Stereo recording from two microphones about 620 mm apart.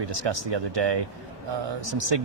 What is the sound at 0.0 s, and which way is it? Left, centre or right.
Speech, right.